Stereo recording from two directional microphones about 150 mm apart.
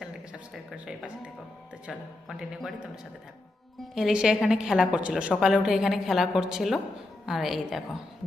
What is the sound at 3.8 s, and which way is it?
A woman's voice, centre (ahead or behind).